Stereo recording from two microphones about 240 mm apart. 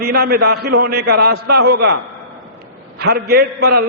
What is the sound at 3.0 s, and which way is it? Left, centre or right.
Speech, right.